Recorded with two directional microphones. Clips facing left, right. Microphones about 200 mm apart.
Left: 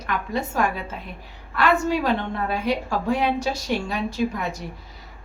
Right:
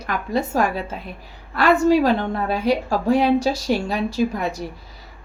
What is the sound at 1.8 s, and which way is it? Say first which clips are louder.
A woman's voice: right 6 dB; 35° right (ahead or behind).